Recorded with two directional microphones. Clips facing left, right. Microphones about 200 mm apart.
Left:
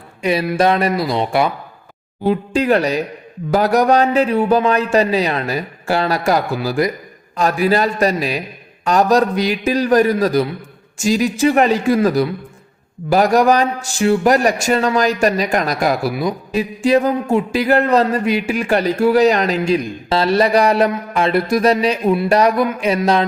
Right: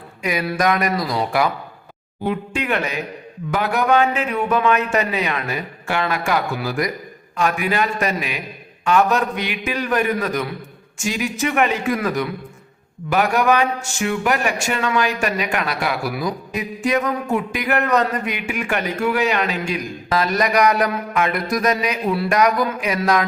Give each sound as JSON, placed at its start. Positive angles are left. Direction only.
{"t": 0.2, "sound": "speech", "side_deg": 30}
{"t": 16.1, "sound": "speech", "side_deg": 25}